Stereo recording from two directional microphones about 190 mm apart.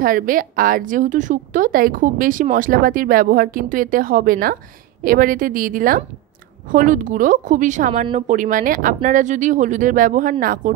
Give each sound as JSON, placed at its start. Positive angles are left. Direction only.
{"t": 0.0, "sound": "a woman's voice", "side_deg": -45}